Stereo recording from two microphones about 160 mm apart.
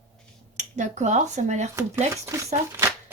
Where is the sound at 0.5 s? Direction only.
50° right (ahead or behind).